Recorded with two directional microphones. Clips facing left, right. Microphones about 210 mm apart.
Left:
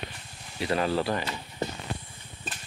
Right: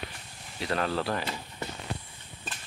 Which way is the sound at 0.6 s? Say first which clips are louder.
Left 3 dB; 5° left (ahead or behind).